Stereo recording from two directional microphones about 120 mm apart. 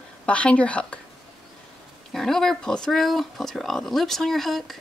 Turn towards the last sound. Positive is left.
turn(degrees=0)  # may be behind; listen again after turning